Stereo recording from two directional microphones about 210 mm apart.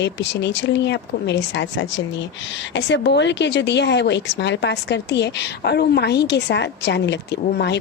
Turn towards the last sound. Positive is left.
turn(degrees=55)  # may be behind; listen again after turning